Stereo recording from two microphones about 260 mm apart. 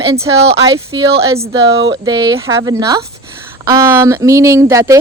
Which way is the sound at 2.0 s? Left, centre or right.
Centre.